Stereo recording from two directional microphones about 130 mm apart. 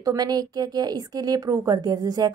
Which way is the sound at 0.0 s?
30° right (ahead or behind).